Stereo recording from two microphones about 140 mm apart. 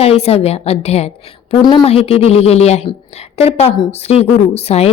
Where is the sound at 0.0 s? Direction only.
45° left (ahead or behind).